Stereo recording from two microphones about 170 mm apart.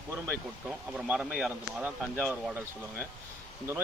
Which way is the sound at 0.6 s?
5° right (ahead or behind).